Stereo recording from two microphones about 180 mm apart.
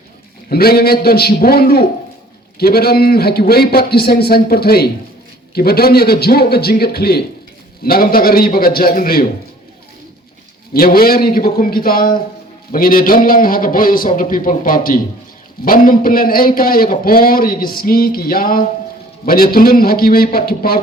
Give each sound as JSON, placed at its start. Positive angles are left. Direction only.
{"t": 0.5, "sound": "a man's voice", "side_deg": 60}
{"t": 10.8, "sound": "a man's voice", "side_deg": 55}